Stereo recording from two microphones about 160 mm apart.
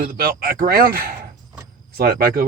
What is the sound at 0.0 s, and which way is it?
Speech, 65° right (ahead or behind).